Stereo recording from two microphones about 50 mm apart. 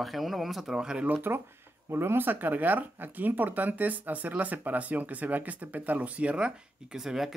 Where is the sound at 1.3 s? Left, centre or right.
Right.